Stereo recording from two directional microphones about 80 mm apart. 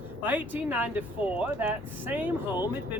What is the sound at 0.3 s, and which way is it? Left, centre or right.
Speech, right.